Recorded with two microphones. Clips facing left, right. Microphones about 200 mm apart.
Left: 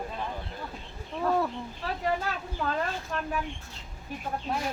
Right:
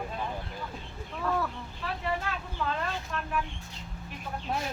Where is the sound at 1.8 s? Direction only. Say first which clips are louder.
Left 1 dB; 40° left (ahead or behind).